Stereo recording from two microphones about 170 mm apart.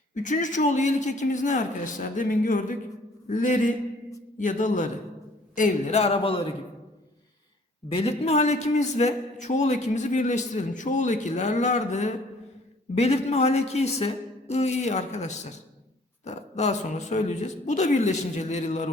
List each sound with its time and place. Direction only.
0.1 s a man's voice: 50° left (ahead or behind)
6.0 s a woman's voice: 35° left (ahead or behind)
7.9 s a man's voice: 35° left (ahead or behind)